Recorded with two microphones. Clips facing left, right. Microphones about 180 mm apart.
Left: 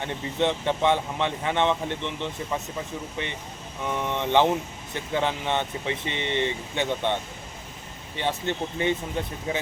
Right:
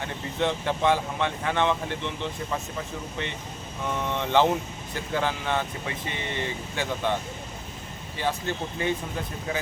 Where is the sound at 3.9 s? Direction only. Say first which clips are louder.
Left 1 dB; 15° left (ahead or behind).